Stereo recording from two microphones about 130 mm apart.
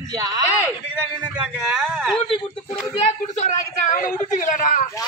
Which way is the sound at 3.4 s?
70° left (ahead or behind).